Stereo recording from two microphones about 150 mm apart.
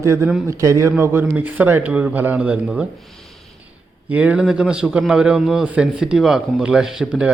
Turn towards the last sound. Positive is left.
turn(degrees=-5)  # may be behind; listen again after turning